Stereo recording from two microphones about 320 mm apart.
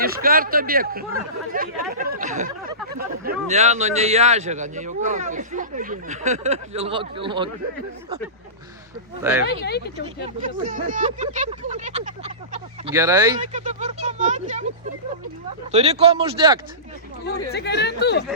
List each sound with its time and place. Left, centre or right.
0.0 s speech: right
9.4 s speech: left
10.2 s speech: right
13.4 s speech: right
15.7 s speech: centre
17.5 s speech: left